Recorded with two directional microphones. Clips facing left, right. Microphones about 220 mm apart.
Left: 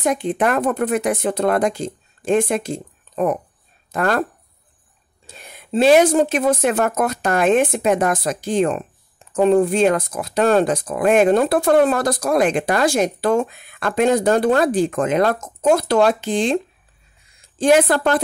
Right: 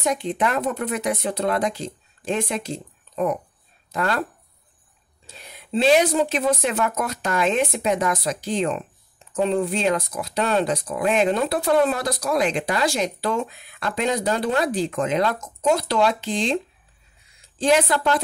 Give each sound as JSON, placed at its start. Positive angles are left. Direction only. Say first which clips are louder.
{"t": 0.0, "sound": "speech", "louder": "left 4 dB", "side_deg": 50}
{"t": 5.2, "sound": "a woman's voice", "louder": "left 2 dB", "side_deg": 50}